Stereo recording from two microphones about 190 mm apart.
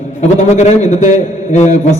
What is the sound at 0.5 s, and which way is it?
A man's voice, 35° left (ahead or behind).